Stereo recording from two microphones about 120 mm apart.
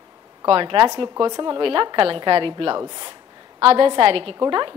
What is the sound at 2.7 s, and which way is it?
A woman's voice, 35° right (ahead or behind).